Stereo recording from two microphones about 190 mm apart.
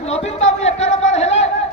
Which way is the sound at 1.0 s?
35° left (ahead or behind).